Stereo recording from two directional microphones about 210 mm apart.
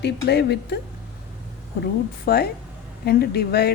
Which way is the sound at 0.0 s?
55° left (ahead or behind).